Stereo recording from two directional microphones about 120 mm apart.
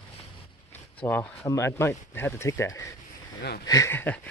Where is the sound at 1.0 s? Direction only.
20° left (ahead or behind).